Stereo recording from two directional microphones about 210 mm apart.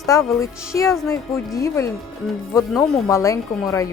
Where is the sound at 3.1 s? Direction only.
15° left (ahead or behind).